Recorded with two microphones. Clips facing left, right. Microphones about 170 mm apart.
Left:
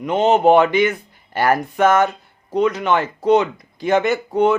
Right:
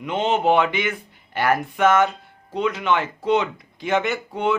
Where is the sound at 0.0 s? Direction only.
40° left (ahead or behind).